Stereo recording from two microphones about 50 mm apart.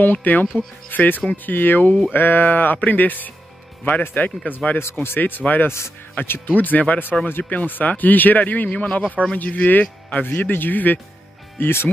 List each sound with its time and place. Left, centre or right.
0.0 s speech: left
4.7 s speech: left
6.5 s speech: left
10.2 s speech: left
11.5 s speech: left